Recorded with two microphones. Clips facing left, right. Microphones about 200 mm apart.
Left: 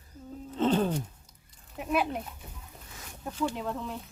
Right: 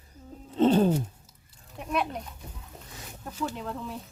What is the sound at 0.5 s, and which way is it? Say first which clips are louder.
Music: right 5 dB; 35° right (ahead or behind).